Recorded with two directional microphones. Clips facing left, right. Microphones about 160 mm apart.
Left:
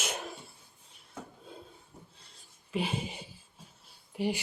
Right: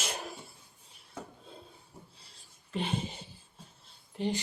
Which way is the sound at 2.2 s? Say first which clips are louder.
Even; centre (ahead or behind).